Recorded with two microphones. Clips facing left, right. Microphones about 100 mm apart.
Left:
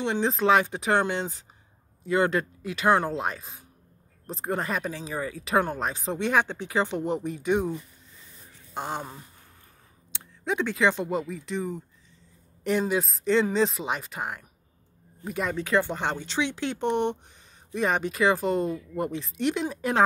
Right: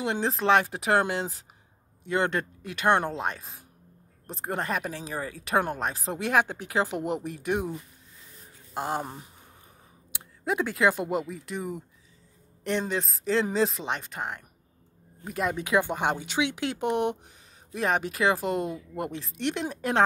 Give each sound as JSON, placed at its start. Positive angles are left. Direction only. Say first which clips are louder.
{"t": 0.0, "sound": "speech", "louder": "left 2 dB", "side_deg": 0}
{"t": 8.7, "sound": "speech", "louder": "right 2 dB", "side_deg": -5}
{"t": 9.0, "sound": "speech", "louder": "right 2 dB", "side_deg": -20}
{"t": 10.1, "sound": "speech", "louder": "even", "side_deg": -5}
{"t": 15.5, "sound": "speech", "louder": "left 2 dB", "side_deg": -10}